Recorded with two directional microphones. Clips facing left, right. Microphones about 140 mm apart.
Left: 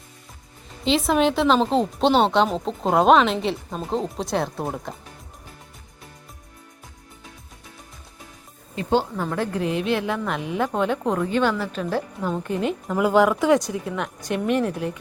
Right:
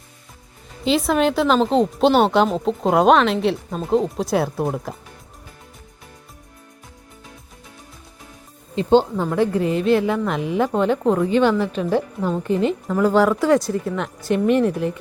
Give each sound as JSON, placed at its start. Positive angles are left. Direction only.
{"t": 0.9, "sound": "speech", "side_deg": 0}
{"t": 8.7, "sound": "speech", "side_deg": -25}
{"t": 9.2, "sound": "speech", "side_deg": -10}